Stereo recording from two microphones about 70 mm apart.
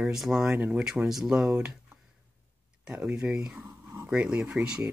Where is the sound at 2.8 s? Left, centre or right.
Centre.